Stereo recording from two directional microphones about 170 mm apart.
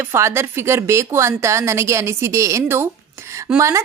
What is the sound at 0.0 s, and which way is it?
Speech, 15° right (ahead or behind).